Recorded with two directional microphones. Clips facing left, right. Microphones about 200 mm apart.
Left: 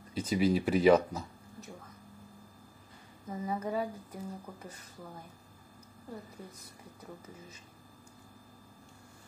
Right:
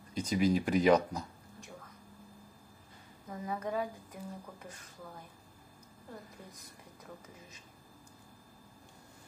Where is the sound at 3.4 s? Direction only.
10° left (ahead or behind).